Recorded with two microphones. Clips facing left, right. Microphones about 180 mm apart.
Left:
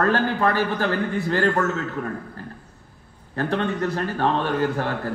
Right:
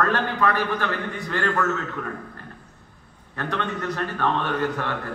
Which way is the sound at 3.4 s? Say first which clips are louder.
Left 5 dB; 35° left (ahead or behind).